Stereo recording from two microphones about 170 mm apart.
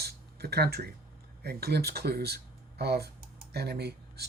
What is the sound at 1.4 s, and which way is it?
Speech, 70° right (ahead or behind).